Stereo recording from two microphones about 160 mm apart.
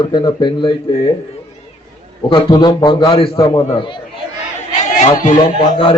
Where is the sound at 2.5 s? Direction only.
25° left (ahead or behind).